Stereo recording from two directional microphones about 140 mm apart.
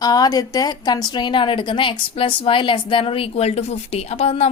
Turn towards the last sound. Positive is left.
turn(degrees=50)  # may be behind; listen again after turning